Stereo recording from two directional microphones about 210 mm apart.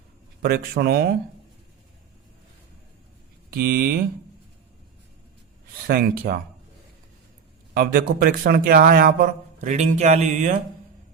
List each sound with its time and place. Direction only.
0.4 s a man's voice: 45° right (ahead or behind)
3.5 s a man's voice: 45° right (ahead or behind)
5.9 s a man's voice: 45° right (ahead or behind)
7.7 s a man's voice: 45° right (ahead or behind)